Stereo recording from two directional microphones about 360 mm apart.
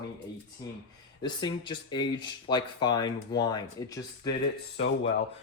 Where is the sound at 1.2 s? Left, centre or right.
Centre.